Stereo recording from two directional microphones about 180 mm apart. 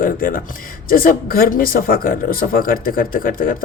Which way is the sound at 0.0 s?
50° left (ahead or behind).